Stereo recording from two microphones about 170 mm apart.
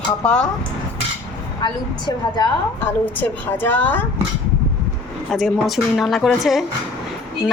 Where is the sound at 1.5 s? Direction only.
25° left (ahead or behind).